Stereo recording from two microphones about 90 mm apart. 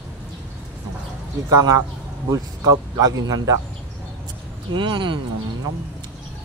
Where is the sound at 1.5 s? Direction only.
40° right (ahead or behind).